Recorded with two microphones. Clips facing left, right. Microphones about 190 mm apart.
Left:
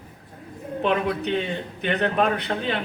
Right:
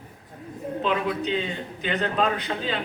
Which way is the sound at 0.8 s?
60° left (ahead or behind).